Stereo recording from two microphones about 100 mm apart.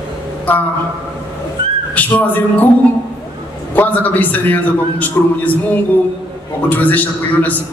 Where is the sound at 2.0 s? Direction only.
15° left (ahead or behind).